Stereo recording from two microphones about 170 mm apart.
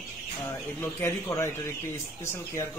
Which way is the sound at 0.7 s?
15° left (ahead or behind).